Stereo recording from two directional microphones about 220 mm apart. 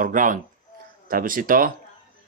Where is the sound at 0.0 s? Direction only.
35° right (ahead or behind).